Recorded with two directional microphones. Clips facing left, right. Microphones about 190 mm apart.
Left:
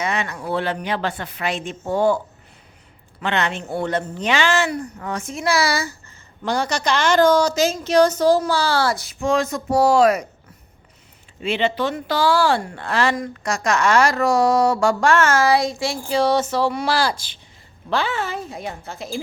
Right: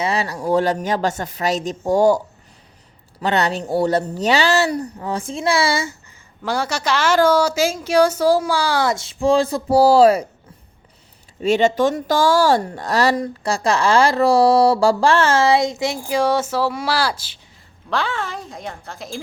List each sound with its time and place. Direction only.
0.0 s speech: 35° right (ahead or behind)
6.4 s a woman's voice: 5° right (ahead or behind); by 10.2 s 30° right (ahead or behind)
11.3 s a woman's voice: 40° right (ahead or behind); by 19.2 s centre (ahead or behind)